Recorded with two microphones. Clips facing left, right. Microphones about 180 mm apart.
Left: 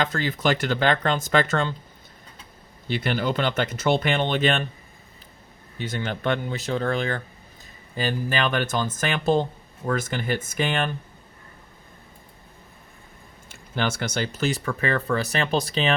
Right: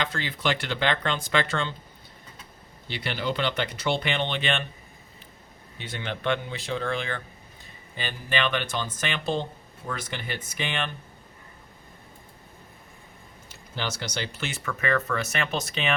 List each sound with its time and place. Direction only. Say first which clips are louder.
0.0 s speech: left 5 dB; 45° left (ahead or behind)
2.8 s speech: left 5 dB; 50° left (ahead or behind)
5.7 s speech: left 5 dB; 40° left (ahead or behind)
13.5 s speech: left 6 dB; 55° left (ahead or behind); by 16.0 s 35° left (ahead or behind)